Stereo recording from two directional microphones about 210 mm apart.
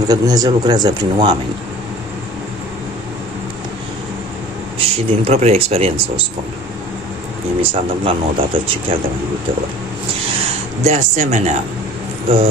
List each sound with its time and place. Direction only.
0.1 s speech: 20° right (ahead or behind)
4.7 s speech: 30° right (ahead or behind)
7.6 s speech: 25° right (ahead or behind)
10.8 s speech: 35° right (ahead or behind)